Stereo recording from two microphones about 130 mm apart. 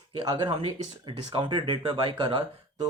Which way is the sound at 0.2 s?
35° right (ahead or behind).